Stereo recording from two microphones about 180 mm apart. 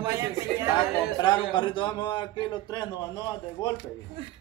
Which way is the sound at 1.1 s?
25° left (ahead or behind).